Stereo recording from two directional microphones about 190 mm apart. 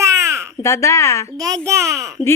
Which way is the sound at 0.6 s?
15° left (ahead or behind).